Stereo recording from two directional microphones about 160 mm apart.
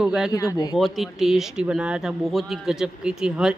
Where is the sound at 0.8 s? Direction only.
Centre (ahead or behind).